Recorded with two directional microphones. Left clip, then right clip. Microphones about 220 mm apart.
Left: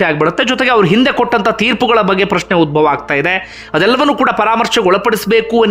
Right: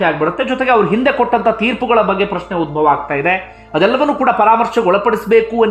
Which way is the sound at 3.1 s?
20° left (ahead or behind).